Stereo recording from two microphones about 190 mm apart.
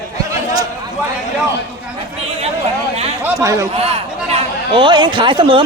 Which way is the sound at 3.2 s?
15° right (ahead or behind).